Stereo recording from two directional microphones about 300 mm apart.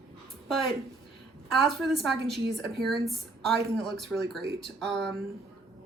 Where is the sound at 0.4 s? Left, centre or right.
Centre.